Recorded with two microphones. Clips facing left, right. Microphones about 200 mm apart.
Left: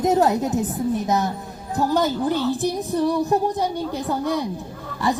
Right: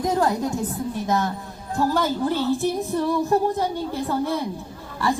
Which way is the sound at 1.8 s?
20° left (ahead or behind).